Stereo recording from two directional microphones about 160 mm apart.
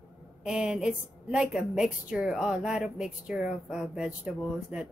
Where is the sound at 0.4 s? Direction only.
5° right (ahead or behind).